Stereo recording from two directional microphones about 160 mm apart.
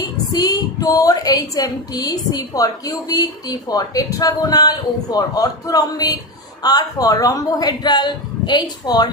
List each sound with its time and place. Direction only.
0.0 s a woman's voice: 25° left (ahead or behind)